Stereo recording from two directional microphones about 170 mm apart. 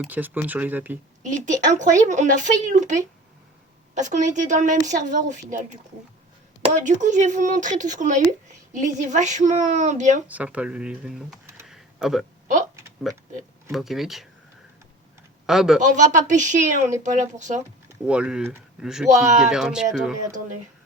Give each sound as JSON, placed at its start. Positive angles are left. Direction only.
{"t": 0.0, "sound": "speech", "side_deg": -10}
{"t": 1.2, "sound": "a woman's voice", "side_deg": -45}
{"t": 6.8, "sound": "a woman's voice", "side_deg": -45}
{"t": 10.2, "sound": "speech", "side_deg": -10}
{"t": 11.6, "sound": "a sound", "side_deg": -5}
{"t": 13.1, "sound": "speech", "side_deg": 0}
{"t": 15.4, "sound": "speech", "side_deg": -5}
{"t": 16.0, "sound": "a woman's voice", "side_deg": -45}
{"t": 18.0, "sound": "speech", "side_deg": -5}